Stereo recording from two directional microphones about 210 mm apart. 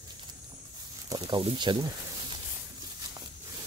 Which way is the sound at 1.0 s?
20° right (ahead or behind).